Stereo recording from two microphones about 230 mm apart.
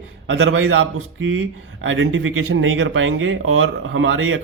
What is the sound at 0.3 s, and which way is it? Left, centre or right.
Speech, right.